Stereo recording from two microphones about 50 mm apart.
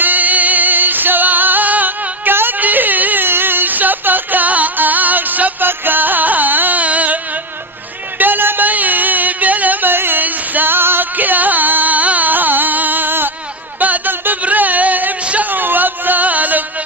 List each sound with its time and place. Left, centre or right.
0.0 s music: right
8.2 s music: right
13.7 s a sound: right
15.4 s music: right